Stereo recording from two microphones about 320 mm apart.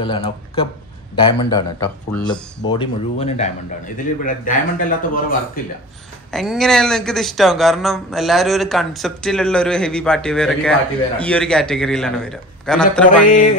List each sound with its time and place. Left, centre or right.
0.0 s a man's voice: centre
6.3 s speech: centre
13.2 s a man's voice: left